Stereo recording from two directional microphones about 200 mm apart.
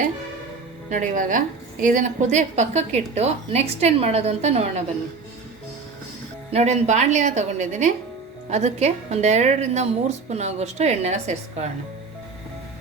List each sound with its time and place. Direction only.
0.9 s speech: 40° right (ahead or behind)
6.5 s speech: 35° right (ahead or behind)